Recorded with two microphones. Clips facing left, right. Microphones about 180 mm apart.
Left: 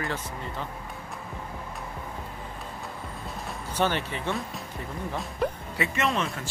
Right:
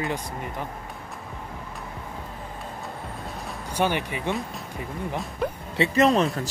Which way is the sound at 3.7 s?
10° right (ahead or behind).